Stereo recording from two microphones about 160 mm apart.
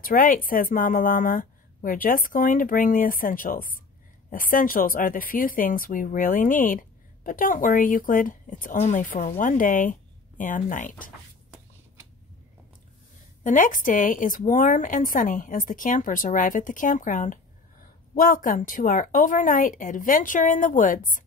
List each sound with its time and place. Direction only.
0.0 s speech: 60° left (ahead or behind)
13.4 s speech: 55° left (ahead or behind)